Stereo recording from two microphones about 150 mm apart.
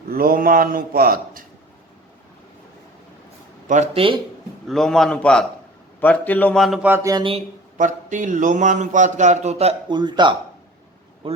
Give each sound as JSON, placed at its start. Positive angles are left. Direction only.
{"t": 0.1, "sound": "a man's voice", "side_deg": -75}
{"t": 3.7, "sound": "speech", "side_deg": -50}
{"t": 4.7, "sound": "a man's voice", "side_deg": 0}
{"t": 6.8, "sound": "a sound", "side_deg": -15}
{"t": 7.8, "sound": "speech", "side_deg": -60}
{"t": 9.9, "sound": "speech", "side_deg": -30}